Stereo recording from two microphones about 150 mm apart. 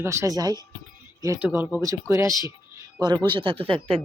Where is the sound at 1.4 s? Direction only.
15° right (ahead or behind); by 4.0 s 40° right (ahead or behind).